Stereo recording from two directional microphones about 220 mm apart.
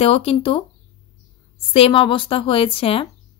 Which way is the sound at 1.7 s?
25° left (ahead or behind).